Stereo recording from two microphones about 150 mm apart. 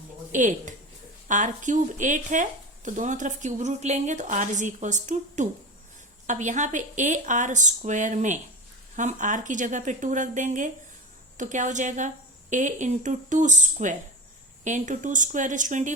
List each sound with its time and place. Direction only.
0.3 s speech: 60° right (ahead or behind)